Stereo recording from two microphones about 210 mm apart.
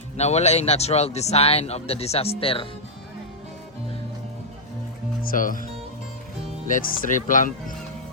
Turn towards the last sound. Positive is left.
turn(degrees=40)  # may be behind; listen again after turning